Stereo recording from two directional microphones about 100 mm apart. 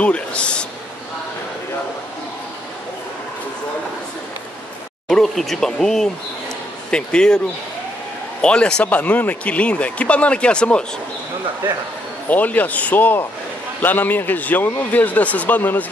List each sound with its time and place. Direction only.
0.0 s speech: 10° left (ahead or behind)
5.0 s speech: 5° left (ahead or behind)
8.4 s speech: 10° left (ahead or behind)
12.3 s speech: 15° left (ahead or behind)